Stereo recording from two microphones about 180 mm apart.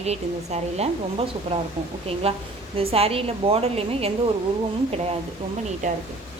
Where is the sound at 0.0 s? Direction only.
35° right (ahead or behind).